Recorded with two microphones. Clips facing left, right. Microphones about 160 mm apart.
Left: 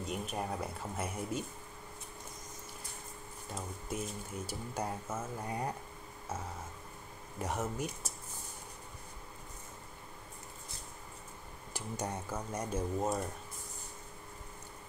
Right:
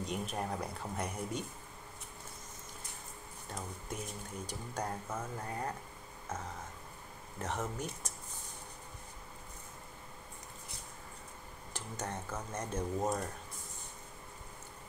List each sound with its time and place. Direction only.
0.0 s speech: centre (ahead or behind)
4.5 s speech: 5° left (ahead or behind)
7.3 s speech: 10° left (ahead or behind)
11.7 s speech: 10° left (ahead or behind)